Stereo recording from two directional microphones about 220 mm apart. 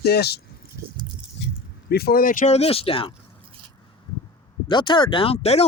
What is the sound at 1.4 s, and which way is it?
Keys jangling, 50° left (ahead or behind).